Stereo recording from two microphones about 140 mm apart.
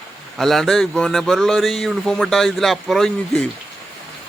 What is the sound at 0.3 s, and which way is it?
A man's voice, centre (ahead or behind).